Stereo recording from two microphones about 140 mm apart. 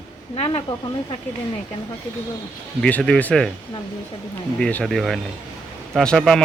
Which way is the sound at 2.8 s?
5° left (ahead or behind).